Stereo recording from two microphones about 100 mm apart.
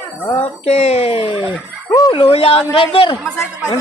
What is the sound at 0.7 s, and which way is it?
Speech, 90° left.